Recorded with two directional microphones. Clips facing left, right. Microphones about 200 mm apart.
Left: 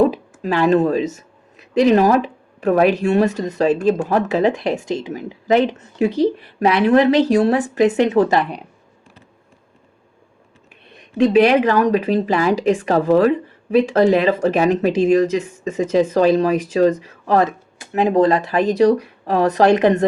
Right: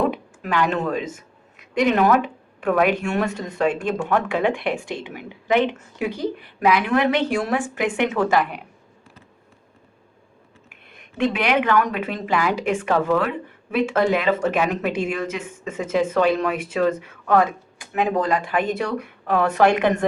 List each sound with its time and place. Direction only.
0.4 s a woman's voice: 35° left (ahead or behind)
11.3 s a woman's voice: 35° left (ahead or behind)